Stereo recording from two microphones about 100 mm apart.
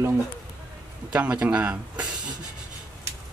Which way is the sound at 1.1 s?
10° right (ahead or behind).